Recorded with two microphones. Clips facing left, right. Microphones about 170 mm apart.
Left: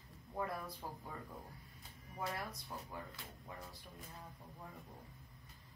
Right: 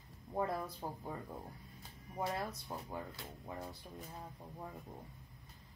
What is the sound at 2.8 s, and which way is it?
Speech, 30° right (ahead or behind).